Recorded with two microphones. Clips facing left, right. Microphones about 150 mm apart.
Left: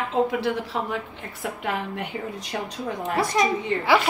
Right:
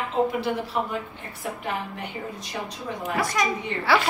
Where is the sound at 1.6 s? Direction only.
75° left (ahead or behind).